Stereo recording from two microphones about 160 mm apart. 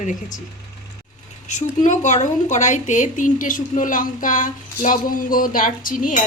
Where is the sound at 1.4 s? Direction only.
50° left (ahead or behind).